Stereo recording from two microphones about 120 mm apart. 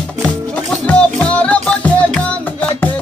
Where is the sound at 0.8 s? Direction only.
10° left (ahead or behind).